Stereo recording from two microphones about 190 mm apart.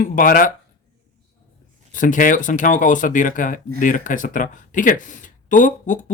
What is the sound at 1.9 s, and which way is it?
Speech, 45° left (ahead or behind).